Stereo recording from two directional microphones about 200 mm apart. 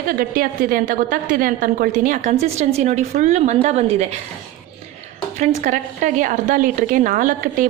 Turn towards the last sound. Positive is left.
turn(degrees=-40)  # may be behind; listen again after turning